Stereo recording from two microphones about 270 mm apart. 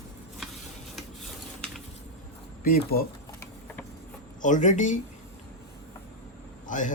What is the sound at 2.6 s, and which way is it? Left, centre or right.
Speech, left.